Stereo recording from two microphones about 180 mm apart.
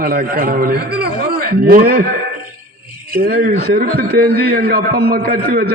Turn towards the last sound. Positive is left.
turn(degrees=-60)  # may be behind; listen again after turning